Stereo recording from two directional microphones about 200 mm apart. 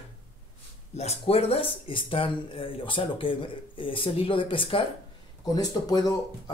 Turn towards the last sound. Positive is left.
turn(degrees=20)  # may be behind; listen again after turning